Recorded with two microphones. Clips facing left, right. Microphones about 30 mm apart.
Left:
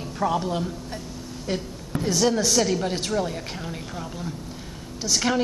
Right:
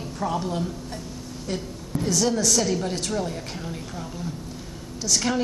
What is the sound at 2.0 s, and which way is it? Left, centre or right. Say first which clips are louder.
A woman's voice: left 1 dB; centre.